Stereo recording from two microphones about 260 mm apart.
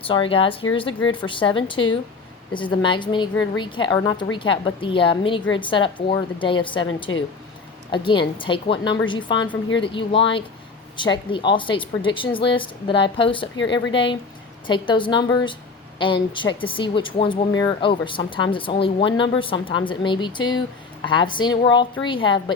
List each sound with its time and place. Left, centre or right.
0.1 s a woman's voice: centre
7.1 s speech: left
7.9 s a woman's voice: centre
14.7 s a woman's voice: centre